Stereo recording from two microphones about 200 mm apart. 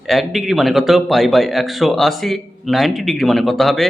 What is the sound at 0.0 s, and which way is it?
A man's voice, centre (ahead or behind).